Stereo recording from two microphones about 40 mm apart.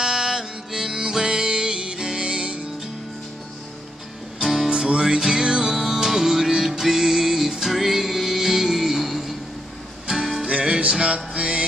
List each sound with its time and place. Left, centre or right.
0.0 s music: centre
4.4 s music: centre
4.6 s music: right
11.3 s mantra: right